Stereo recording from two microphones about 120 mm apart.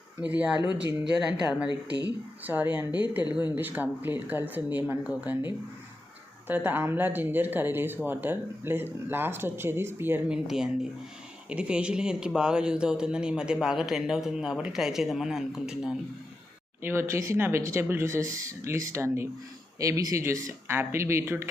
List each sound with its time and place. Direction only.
0.3 s speech: 15° right (ahead or behind)
0.6 s speech: 40° left (ahead or behind)
1.5 s speech: 10° right (ahead or behind)
6.5 s speech: 15° right (ahead or behind)
10.3 s speech: 5° right (ahead or behind)
16.8 s speech: 20° right (ahead or behind)